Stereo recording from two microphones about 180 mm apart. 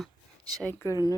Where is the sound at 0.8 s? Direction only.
20° left (ahead or behind).